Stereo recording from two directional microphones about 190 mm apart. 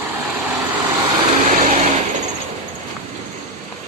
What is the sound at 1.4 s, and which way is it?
Vehicle, 40° right (ahead or behind).